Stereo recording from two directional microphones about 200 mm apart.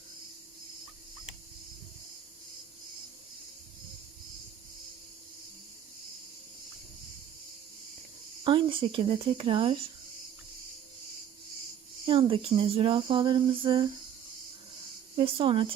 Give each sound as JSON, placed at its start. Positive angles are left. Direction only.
{"t": 8.4, "sound": "speech", "side_deg": -25}
{"t": 12.0, "sound": "speech", "side_deg": -25}
{"t": 15.2, "sound": "speech", "side_deg": -25}